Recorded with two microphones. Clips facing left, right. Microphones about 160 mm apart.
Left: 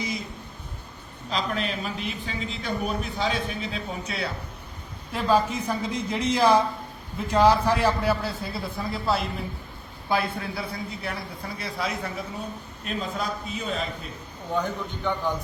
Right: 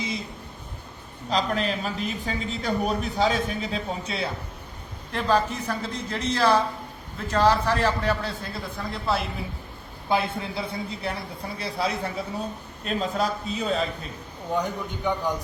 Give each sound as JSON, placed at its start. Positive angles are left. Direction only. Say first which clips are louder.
{"t": 1.3, "sound": "a man's voice", "louder": "right 3 dB", "side_deg": -40}
{"t": 5.1, "sound": "a man's voice", "louder": "left 1 dB", "side_deg": 10}
{"t": 10.1, "sound": "a man's voice", "louder": "right 1 dB", "side_deg": -25}
{"t": 14.5, "sound": "a man's voice", "louder": "right 1 dB", "side_deg": -15}